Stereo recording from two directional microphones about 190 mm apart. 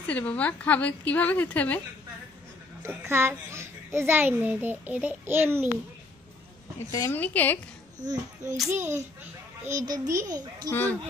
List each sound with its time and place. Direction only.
0.0 s a woman's voice: 5° left (ahead or behind)
3.1 s a child's voice: 15° right (ahead or behind)
6.9 s a woman's voice: 15° left (ahead or behind)
8.0 s a child's voice: 20° right (ahead or behind)
10.7 s a woman's voice: 10° left (ahead or behind)